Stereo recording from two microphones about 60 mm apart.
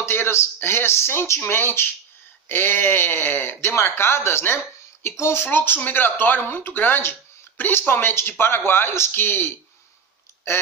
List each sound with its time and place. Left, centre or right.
0.0 s speech: left